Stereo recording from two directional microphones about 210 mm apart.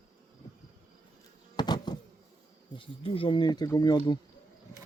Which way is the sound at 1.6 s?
20° left (ahead or behind).